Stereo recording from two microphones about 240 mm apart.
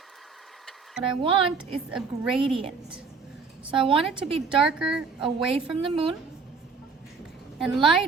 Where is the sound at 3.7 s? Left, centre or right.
Right.